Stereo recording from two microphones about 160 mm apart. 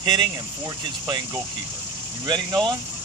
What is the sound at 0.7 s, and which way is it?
Speech, 25° right (ahead or behind).